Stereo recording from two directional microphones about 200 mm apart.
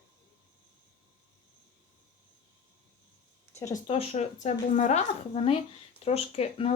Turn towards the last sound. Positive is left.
turn(degrees=30)  # may be behind; listen again after turning